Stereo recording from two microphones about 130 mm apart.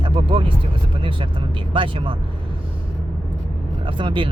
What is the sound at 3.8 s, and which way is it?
Speech, 40° right (ahead or behind).